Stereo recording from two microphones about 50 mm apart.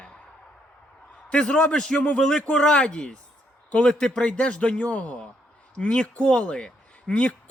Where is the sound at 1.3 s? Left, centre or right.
Centre.